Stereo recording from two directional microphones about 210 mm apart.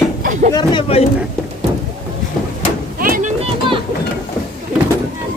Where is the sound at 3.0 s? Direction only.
40° right (ahead or behind).